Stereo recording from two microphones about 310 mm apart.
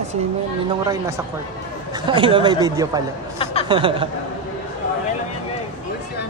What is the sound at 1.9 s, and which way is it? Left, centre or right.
Speech, centre.